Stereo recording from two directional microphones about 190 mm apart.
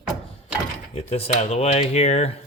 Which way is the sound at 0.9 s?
35° left (ahead or behind).